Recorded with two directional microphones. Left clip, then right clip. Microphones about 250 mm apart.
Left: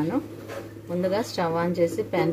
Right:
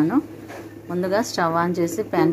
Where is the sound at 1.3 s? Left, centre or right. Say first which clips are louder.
Right 5 dB; centre.